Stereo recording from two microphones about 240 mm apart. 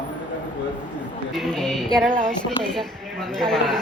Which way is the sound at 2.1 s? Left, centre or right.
Right.